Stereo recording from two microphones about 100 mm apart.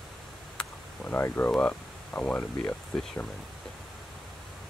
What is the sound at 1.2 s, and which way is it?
Speech, 20° left (ahead or behind).